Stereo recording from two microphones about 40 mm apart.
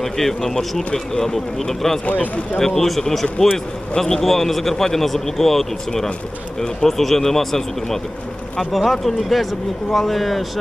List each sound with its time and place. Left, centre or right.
0.0 s a man's voice: centre
2.1 s speech: left
2.6 s a man's voice: centre